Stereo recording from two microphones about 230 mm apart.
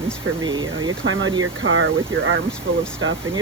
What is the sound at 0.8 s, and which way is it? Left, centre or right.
Speech, right.